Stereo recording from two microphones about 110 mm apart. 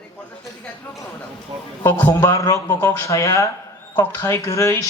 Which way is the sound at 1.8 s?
20° left (ahead or behind).